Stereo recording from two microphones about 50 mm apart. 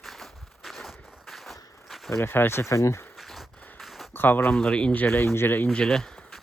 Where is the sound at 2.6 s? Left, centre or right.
Left.